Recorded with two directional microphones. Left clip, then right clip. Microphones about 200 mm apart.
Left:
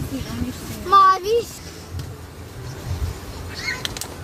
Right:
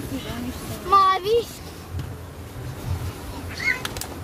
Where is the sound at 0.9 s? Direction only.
20° left (ahead or behind).